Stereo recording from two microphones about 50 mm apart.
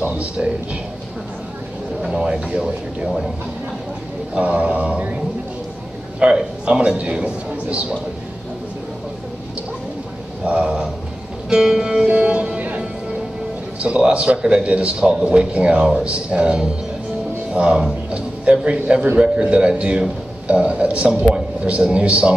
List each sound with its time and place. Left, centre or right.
2.1 s a man's voice: right
4.4 s a man's voice: right
10.4 s a man's voice: right
11.4 s music: centre
12.1 s music: right
13.7 s a man's voice: right
15.8 s music: centre
16.1 s a man's voice: right